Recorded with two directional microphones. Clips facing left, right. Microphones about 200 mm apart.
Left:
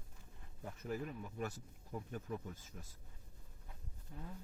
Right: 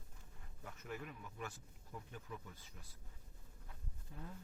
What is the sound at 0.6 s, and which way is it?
Speech, 35° left (ahead or behind).